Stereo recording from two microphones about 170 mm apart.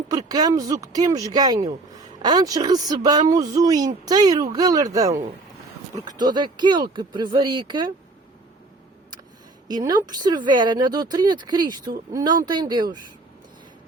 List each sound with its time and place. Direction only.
0.1 s speech: 20° right (ahead or behind)
9.6 s speech: 25° right (ahead or behind)